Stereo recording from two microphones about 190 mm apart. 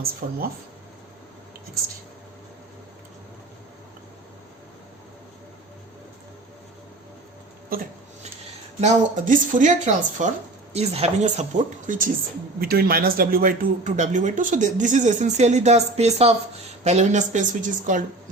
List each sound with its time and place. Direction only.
8.8 s a man's voice: 40° right (ahead or behind)